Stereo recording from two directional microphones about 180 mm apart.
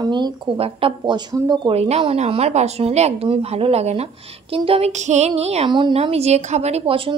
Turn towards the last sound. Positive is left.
turn(degrees=-30)  # may be behind; listen again after turning